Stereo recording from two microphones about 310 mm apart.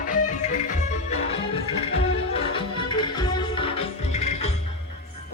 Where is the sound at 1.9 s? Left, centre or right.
Centre.